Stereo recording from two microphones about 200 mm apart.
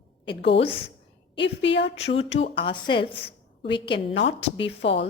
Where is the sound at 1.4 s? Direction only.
65° left (ahead or behind).